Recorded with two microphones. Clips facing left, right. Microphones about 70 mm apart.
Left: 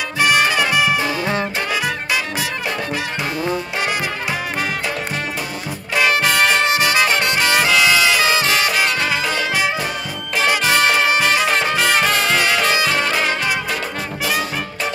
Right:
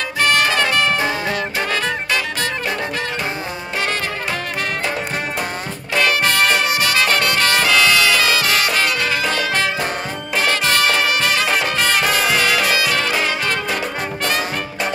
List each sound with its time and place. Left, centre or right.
0.2 s music: centre
5.9 s music: centre
7.4 s brass instrument: centre
9.4 s music: centre
11.7 s brass instrument: centre